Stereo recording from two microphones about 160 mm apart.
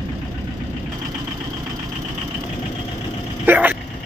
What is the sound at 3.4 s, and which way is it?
Vehicle, 10° right (ahead or behind).